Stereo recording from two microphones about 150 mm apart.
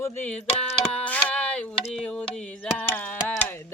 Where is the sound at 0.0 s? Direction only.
15° left (ahead or behind).